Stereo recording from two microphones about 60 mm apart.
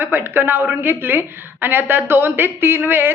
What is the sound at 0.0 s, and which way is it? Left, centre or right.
A man's voice, right.